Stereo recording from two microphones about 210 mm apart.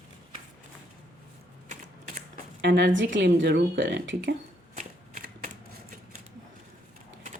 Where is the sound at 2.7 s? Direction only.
60° right (ahead or behind).